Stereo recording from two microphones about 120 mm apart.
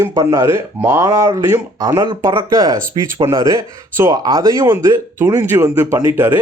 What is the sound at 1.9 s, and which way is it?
Speech, 40° right (ahead or behind).